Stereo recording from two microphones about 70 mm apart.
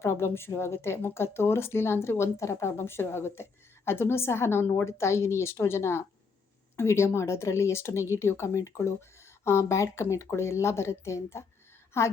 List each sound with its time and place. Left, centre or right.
0.0 s speech: left